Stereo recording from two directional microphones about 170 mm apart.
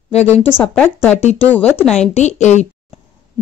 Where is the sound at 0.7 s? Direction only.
5° left (ahead or behind).